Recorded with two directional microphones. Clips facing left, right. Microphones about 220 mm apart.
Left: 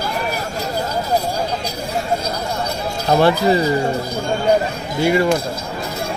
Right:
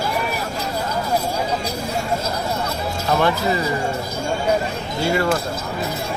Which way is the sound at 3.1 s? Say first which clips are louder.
Left 5 dB; 35° left (ahead or behind).